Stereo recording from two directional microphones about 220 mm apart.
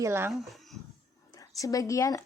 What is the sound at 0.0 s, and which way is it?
Speech, 10° right (ahead or behind).